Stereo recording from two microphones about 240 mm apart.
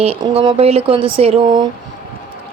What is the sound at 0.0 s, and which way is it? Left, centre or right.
A woman's voice, right.